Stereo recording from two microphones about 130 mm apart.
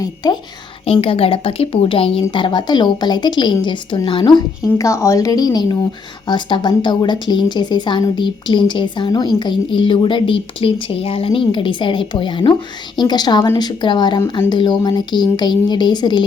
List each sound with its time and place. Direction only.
0.0 s speech: 30° left (ahead or behind)
1.0 s a woman's voice: 45° left (ahead or behind)
4.8 s speech: 25° left (ahead or behind)